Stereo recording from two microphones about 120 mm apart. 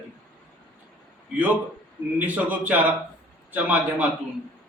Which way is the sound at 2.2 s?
15° right (ahead or behind).